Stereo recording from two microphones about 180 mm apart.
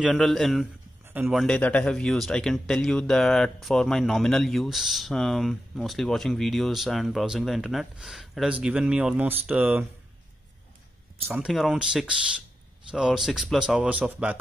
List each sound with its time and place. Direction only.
0.0 s speech: centre (ahead or behind)
1.4 s speech: 5° left (ahead or behind)
11.2 s speech: 5° right (ahead or behind)